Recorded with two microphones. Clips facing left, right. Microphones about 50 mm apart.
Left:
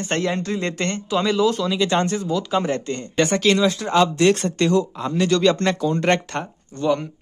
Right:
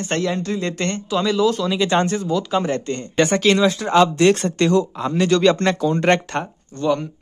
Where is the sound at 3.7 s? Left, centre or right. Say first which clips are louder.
Right 3 dB; right.